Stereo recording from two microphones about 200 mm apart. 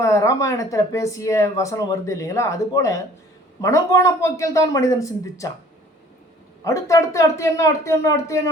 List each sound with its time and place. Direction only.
0.0 s speech: 15° left (ahead or behind)
6.7 s speech: 15° left (ahead or behind)